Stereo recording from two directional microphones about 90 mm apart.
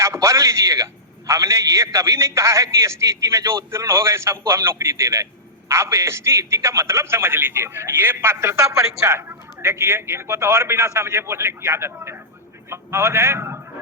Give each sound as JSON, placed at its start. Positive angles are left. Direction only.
{"t": 0.0, "sound": "a man's voice", "side_deg": -35}